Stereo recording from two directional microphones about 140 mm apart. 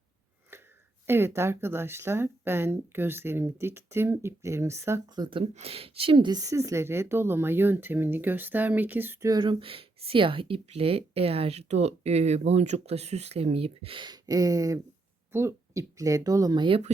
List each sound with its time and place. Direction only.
0.5 s a sound: 15° right (ahead or behind)
1.0 s speech: 15° right (ahead or behind); by 5.5 s 35° right (ahead or behind)
5.5 s speech: 45° right (ahead or behind); by 9.3 s 15° right (ahead or behind)
9.3 s speech: 35° right (ahead or behind)